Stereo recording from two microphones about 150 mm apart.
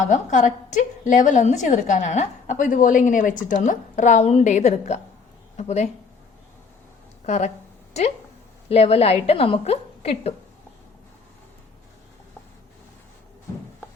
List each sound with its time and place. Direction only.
0.0 s a woman's voice: 55° left (ahead or behind)
7.3 s a woman's voice: 50° left (ahead or behind)